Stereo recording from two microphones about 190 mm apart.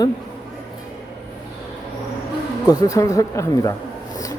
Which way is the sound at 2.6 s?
20° left (ahead or behind).